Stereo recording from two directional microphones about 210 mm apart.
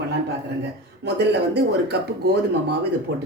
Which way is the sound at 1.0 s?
55° right (ahead or behind).